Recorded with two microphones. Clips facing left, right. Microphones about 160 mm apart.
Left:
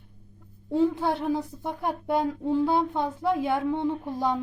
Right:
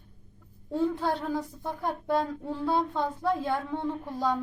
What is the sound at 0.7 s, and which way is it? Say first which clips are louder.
A woman's voice: left 4 dB; 20° left (ahead or behind).